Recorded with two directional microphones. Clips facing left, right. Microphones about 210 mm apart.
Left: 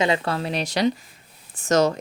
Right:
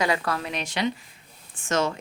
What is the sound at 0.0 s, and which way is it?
A woman's voice, 25° left (ahead or behind).